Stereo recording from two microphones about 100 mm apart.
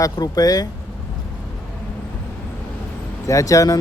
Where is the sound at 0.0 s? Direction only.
40° left (ahead or behind).